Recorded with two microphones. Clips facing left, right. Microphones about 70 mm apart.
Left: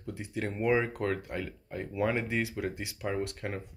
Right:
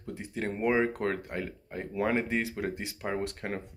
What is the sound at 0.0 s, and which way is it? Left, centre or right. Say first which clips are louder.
Speech: right 1 dB; right.